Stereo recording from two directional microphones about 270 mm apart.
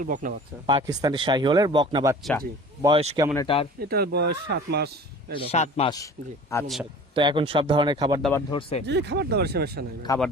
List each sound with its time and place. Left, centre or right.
0.0 s speech: right
0.8 s speech: centre
3.3 s a man's voice: centre
3.8 s speech: right
5.3 s a man's voice: left
6.5 s speech: centre
7.1 s speech: centre
8.2 s speech: centre
8.9 s speech: right
10.1 s speech: centre